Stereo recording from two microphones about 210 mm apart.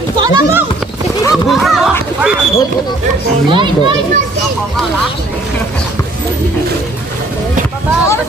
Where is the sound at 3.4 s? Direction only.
25° right (ahead or behind).